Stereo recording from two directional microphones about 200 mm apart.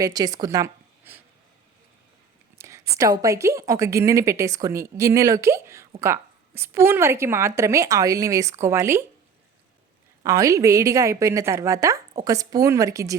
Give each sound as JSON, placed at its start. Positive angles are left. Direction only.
{"t": 0.0, "sound": "a woman's voice", "side_deg": -20}
{"t": 2.6, "sound": "a sound", "side_deg": -15}
{"t": 3.0, "sound": "a woman's voice", "side_deg": -15}
{"t": 10.2, "sound": "a woman's voice", "side_deg": -15}